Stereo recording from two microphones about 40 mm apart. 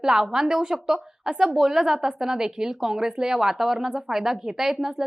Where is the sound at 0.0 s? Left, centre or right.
Centre.